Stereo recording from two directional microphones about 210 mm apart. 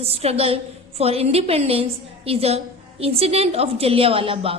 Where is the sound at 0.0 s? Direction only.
30° right (ahead or behind).